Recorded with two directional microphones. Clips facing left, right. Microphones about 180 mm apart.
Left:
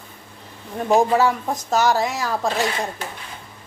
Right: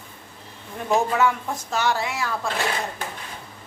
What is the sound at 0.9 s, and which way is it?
A woman's voice, 35° left (ahead or behind).